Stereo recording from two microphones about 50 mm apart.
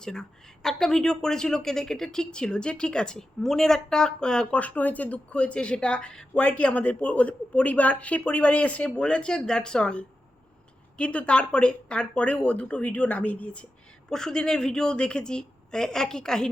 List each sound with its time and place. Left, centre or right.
0.0 s a woman's voice: centre
4.6 s speech: left
14.1 s a woman's voice: centre